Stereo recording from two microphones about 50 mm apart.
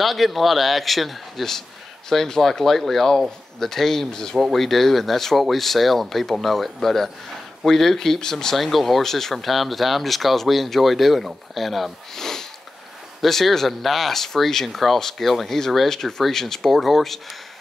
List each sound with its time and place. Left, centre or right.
0.0 s speech: centre